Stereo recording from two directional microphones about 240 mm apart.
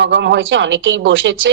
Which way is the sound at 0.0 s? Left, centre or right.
Right.